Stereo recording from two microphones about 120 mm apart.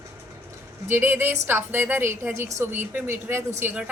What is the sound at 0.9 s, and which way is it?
A woman's voice, 15° right (ahead or behind).